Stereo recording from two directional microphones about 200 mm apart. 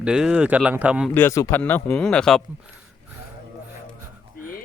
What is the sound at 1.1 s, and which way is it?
Speech, 10° left (ahead or behind).